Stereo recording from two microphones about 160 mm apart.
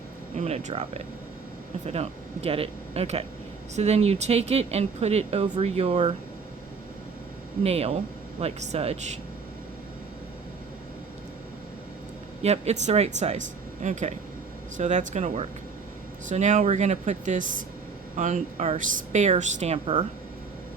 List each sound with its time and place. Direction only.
0.3 s speech: 45° right (ahead or behind)
7.6 s speech: 40° right (ahead or behind)
12.4 s speech: 40° right (ahead or behind)